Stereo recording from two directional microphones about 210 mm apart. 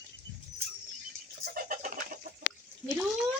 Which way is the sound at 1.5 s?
40° right (ahead or behind).